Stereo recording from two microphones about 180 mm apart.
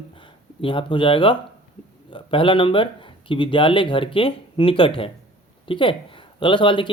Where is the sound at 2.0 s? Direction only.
30° left (ahead or behind).